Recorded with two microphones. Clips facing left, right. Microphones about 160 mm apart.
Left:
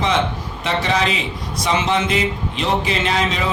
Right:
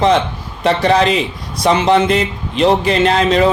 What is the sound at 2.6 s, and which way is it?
Speech, 45° right (ahead or behind).